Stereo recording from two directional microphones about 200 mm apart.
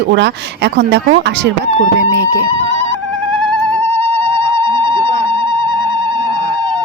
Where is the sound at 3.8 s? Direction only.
10° left (ahead or behind).